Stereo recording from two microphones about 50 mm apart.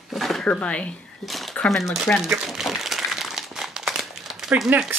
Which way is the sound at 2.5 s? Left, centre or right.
Centre.